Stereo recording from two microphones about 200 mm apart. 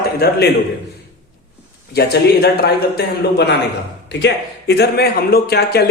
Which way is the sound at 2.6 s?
55° left (ahead or behind).